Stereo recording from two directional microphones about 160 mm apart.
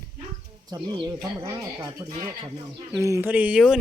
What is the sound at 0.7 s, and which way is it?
Speech, 25° right (ahead or behind).